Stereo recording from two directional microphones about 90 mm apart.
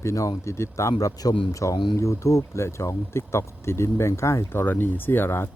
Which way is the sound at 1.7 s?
60° left (ahead or behind).